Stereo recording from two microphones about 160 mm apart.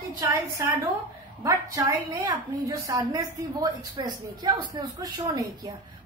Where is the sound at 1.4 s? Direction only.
20° right (ahead or behind).